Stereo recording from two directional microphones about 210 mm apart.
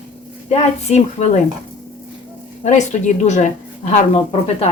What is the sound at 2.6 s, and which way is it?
Speech, 35° left (ahead or behind).